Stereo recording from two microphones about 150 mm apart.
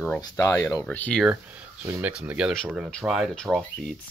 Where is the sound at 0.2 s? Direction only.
20° left (ahead or behind).